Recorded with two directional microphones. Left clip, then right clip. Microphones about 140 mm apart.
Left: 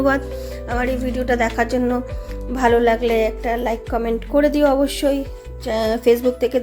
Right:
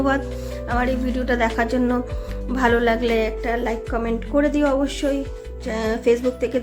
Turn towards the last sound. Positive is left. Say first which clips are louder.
# left 3 dB
turn(degrees=25)  # may be behind; listen again after turning